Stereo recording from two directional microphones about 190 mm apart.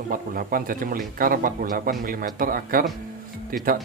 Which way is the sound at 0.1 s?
50° right (ahead or behind).